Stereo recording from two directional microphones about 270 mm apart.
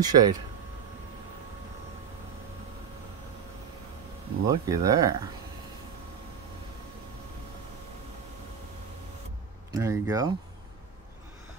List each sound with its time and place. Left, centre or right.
0.0 s speech: centre
4.5 s speech: centre
9.7 s speech: centre